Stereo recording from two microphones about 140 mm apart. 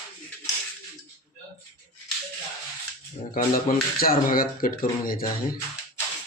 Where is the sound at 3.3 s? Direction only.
85° left.